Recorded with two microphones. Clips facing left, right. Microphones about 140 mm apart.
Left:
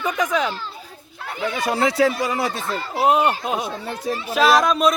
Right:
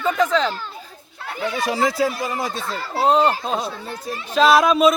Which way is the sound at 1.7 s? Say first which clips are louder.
Left 4 dB; 70° left (ahead or behind).